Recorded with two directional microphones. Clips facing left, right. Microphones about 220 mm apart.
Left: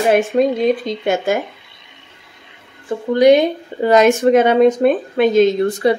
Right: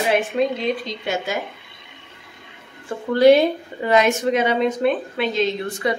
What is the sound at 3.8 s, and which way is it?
Speech, 45° left (ahead or behind).